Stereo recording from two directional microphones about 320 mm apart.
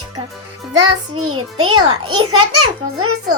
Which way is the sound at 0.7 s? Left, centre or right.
Centre.